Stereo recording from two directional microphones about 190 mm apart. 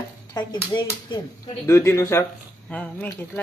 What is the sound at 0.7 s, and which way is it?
A woman's voice, 20° left (ahead or behind).